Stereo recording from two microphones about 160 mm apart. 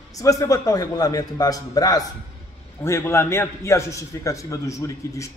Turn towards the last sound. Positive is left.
turn(degrees=20)  # may be behind; listen again after turning